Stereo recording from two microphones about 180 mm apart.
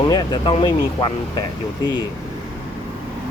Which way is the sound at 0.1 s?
25° left (ahead or behind).